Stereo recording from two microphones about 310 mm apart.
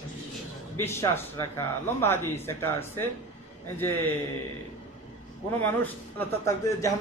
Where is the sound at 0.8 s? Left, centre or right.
Centre.